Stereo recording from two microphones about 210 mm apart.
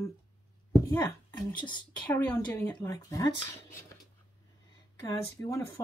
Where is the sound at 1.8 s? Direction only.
10° left (ahead or behind).